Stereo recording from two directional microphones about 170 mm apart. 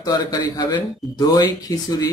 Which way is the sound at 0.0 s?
25° left (ahead or behind).